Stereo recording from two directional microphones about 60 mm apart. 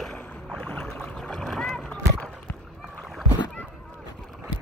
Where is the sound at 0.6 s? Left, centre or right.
Left.